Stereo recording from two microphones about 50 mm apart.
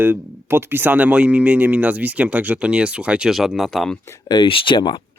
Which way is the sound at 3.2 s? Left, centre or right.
Centre.